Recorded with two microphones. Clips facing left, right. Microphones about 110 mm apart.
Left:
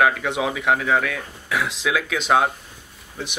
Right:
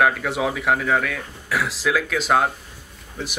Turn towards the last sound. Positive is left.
turn(degrees=0)  # may be behind; listen again after turning